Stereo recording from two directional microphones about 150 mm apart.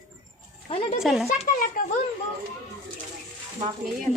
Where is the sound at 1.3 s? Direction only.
60° left (ahead or behind).